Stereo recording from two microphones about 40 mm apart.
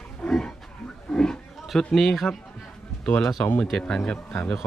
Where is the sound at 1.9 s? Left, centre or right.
Centre.